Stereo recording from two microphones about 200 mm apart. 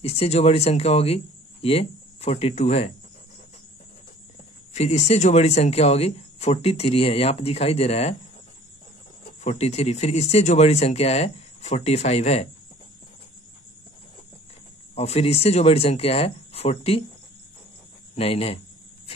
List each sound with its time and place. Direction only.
0.0 s speech: 30° left (ahead or behind)
4.7 s speech: 35° left (ahead or behind)
9.4 s speech: 35° left (ahead or behind)
15.0 s speech: 30° left (ahead or behind)
18.1 s speech: 30° left (ahead or behind)